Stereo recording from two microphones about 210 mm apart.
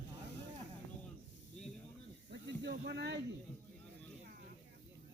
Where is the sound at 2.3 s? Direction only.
50° right (ahead or behind).